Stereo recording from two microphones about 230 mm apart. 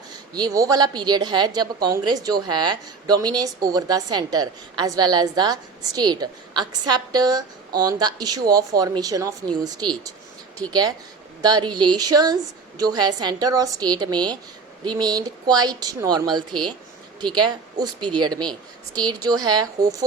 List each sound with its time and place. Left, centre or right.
0.3 s a woman's voice: centre